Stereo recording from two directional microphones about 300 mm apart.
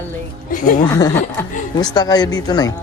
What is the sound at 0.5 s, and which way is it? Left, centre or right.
Speech, left.